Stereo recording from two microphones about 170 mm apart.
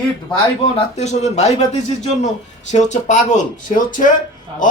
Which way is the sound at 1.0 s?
40° left (ahead or behind).